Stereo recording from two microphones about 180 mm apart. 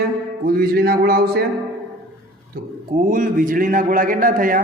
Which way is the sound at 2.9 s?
50° right (ahead or behind).